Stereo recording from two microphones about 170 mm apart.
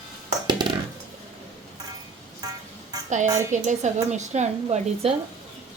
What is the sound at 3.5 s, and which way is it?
A woman's voice, 45° right (ahead or behind).